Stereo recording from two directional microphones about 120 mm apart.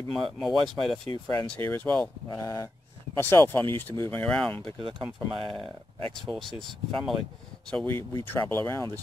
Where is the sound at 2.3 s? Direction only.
30° left (ahead or behind); by 4.7 s 5° left (ahead or behind).